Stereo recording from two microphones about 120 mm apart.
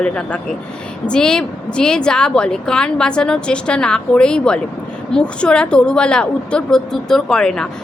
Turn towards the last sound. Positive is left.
turn(degrees=5)  # may be behind; listen again after turning